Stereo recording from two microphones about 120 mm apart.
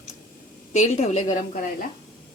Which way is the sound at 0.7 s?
70° left (ahead or behind).